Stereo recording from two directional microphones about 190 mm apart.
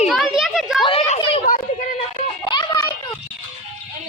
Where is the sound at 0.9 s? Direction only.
35° left (ahead or behind).